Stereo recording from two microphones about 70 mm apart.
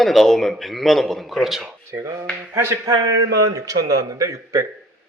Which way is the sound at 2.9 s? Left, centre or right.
Right.